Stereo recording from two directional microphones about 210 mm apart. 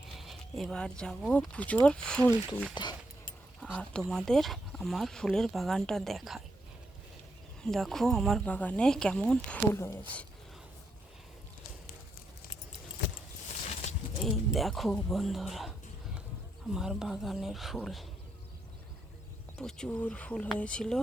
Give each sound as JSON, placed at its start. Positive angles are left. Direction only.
{"t": 0.2, "sound": "speech", "side_deg": 0}
{"t": 2.8, "sound": "speech", "side_deg": 20}
{"t": 3.6, "sound": "speech", "side_deg": 5}
{"t": 7.6, "sound": "speech", "side_deg": 0}
{"t": 14.3, "sound": "speech", "side_deg": 0}
{"t": 16.7, "sound": "speech", "side_deg": 0}
{"t": 19.5, "sound": "speech", "side_deg": 5}